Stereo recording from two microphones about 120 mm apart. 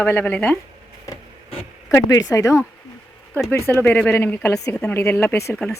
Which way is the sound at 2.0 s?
30° left (ahead or behind).